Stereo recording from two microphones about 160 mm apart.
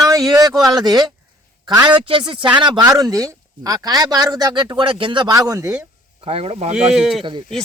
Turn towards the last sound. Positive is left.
turn(degrees=-30)  # may be behind; listen again after turning